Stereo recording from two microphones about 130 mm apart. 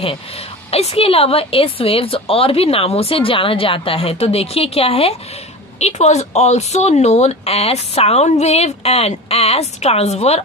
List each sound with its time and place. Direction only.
0.7 s a woman's voice: 50° left (ahead or behind)
5.8 s speech: 60° left (ahead or behind)